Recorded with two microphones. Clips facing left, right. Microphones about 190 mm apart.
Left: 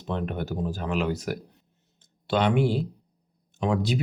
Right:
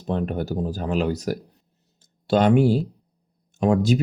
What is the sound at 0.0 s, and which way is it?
Speech, 40° right (ahead or behind).